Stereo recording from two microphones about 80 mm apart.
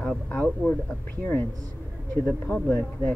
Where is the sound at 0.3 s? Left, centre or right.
Centre.